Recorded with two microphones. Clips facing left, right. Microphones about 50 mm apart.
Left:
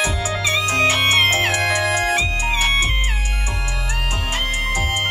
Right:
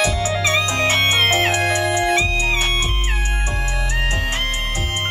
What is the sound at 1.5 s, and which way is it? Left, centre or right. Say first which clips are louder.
Music: even; left.